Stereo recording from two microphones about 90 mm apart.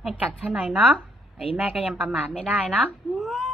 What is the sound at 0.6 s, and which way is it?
Speech, 15° right (ahead or behind).